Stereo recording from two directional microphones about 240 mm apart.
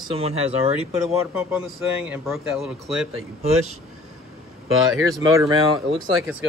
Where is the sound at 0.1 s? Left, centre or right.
Right.